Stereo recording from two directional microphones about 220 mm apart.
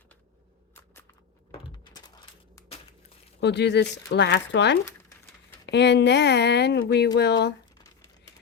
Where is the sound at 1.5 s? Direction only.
20° left (ahead or behind).